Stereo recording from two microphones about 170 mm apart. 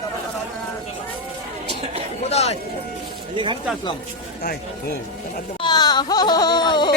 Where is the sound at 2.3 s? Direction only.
40° left (ahead or behind).